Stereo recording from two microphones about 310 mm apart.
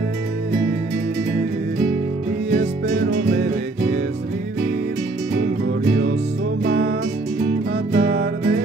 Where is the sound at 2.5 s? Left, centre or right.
Right.